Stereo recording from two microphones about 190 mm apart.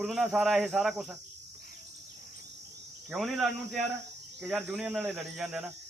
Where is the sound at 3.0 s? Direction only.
Centre (ahead or behind).